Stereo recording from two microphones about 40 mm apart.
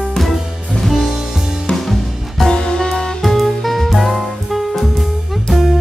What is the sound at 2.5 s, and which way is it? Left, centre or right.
Music, centre.